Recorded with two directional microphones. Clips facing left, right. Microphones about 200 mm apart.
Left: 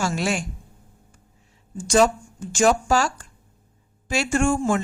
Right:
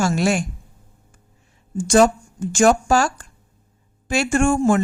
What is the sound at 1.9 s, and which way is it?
Speech, 50° right (ahead or behind).